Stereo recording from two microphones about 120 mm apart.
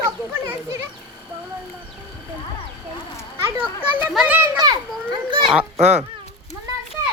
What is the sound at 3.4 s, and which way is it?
Children playing, 20° right (ahead or behind).